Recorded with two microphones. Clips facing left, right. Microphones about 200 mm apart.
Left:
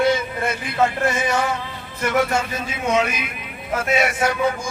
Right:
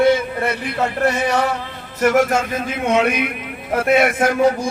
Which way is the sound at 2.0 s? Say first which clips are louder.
Right 5 dB; 45° right (ahead or behind).